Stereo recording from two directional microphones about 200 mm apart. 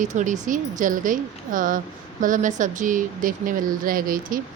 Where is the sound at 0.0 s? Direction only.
40° right (ahead or behind).